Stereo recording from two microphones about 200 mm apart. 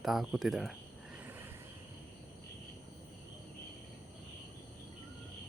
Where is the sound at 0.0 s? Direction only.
Centre (ahead or behind).